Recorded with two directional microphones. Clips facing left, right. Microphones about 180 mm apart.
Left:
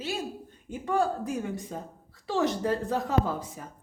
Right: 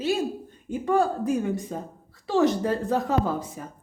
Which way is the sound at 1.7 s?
50° right (ahead or behind).